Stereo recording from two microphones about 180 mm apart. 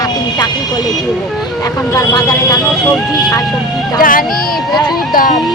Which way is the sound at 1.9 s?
20° left (ahead or behind).